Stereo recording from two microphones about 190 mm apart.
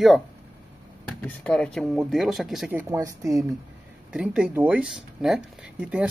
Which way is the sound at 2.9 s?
15° right (ahead or behind).